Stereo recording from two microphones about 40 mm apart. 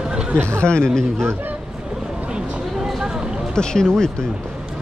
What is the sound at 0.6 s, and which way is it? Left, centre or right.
Speech, left.